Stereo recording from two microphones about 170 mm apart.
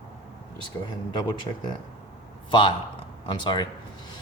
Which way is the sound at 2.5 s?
30° left (ahead or behind).